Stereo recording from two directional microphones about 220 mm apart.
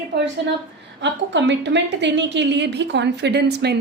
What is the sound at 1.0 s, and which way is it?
A woman's voice, 55° right (ahead or behind).